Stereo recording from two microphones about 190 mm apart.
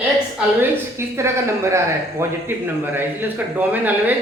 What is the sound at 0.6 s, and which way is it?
Speech, 15° right (ahead or behind).